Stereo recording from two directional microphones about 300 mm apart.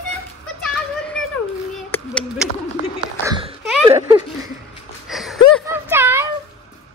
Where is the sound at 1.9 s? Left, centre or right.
Centre.